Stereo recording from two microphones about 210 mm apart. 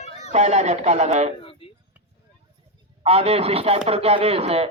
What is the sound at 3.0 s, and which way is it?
A man's voice, 30° right (ahead or behind).